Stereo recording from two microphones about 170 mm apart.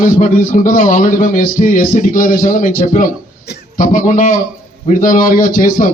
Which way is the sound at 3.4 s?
75° left (ahead or behind).